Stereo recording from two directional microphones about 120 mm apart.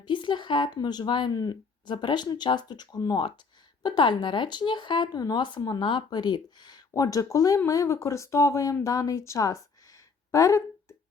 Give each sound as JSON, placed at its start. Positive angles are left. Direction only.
{"t": 0.0, "sound": "speech", "side_deg": 40}
{"t": 3.2, "sound": "speech", "side_deg": 45}